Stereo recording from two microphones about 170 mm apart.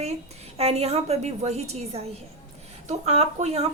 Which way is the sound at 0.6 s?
35° right (ahead or behind).